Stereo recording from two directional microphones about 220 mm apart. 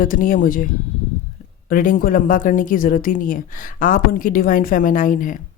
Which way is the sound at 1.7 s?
40° left (ahead or behind).